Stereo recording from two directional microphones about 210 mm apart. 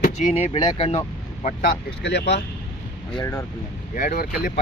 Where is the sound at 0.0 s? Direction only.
35° left (ahead or behind).